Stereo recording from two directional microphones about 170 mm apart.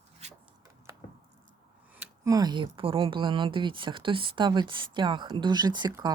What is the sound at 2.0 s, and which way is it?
Speech, 20° right (ahead or behind).